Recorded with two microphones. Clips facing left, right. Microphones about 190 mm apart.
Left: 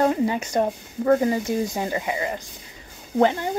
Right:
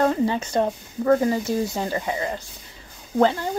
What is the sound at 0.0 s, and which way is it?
Speech, 15° left (ahead or behind).